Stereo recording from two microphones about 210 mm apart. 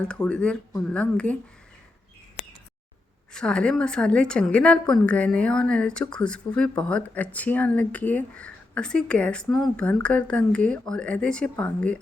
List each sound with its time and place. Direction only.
0.0 s a woman's voice: 5° left (ahead or behind)
3.3 s a woman's voice: 5° left (ahead or behind)